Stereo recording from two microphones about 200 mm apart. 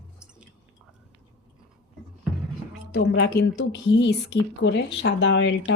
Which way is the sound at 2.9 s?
60° left (ahead or behind).